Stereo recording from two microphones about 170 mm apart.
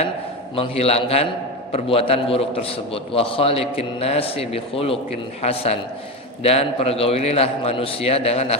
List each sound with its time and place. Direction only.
0.5 s a man's voice: 35° left (ahead or behind)